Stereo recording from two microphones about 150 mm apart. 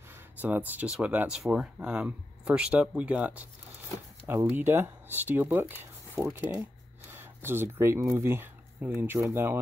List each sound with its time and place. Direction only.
0.1 s speech: 10° right (ahead or behind)